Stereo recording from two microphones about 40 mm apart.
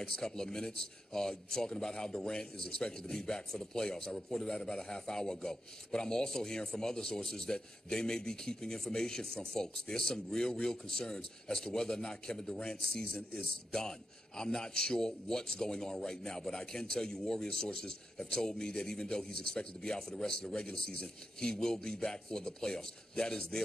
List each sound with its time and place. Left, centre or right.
0.0 s a man's voice: centre